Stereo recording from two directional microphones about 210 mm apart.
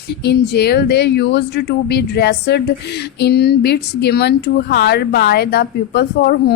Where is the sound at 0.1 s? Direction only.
50° left (ahead or behind).